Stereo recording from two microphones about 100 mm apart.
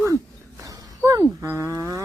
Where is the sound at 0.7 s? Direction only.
35° right (ahead or behind).